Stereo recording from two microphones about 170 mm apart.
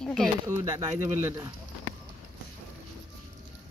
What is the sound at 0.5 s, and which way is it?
Speech, 20° right (ahead or behind).